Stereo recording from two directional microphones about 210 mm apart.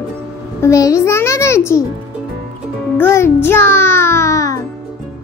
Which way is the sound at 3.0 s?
10° left (ahead or behind).